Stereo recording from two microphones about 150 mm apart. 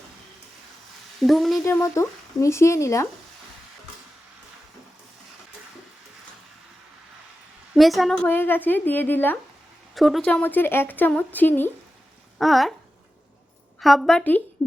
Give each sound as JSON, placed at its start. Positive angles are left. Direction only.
{"t": 1.2, "sound": "a woman's voice", "side_deg": 0}
{"t": 1.6, "sound": "speech", "side_deg": 20}
{"t": 7.8, "sound": "speech", "side_deg": 0}
{"t": 9.9, "sound": "speech", "side_deg": 0}
{"t": 12.4, "sound": "a woman's voice", "side_deg": 0}
{"t": 13.7, "sound": "a woman's voice", "side_deg": 0}